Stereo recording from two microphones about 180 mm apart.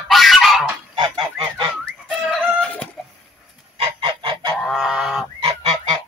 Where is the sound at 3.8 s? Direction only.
25° right (ahead or behind).